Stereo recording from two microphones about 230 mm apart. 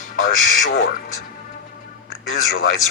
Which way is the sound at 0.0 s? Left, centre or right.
Left.